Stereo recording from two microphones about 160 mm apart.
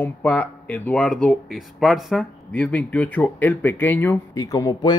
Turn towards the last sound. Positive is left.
turn(degrees=25)  # may be behind; listen again after turning